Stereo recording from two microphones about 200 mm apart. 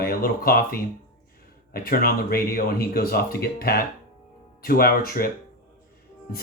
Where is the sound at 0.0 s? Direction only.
50° left (ahead or behind).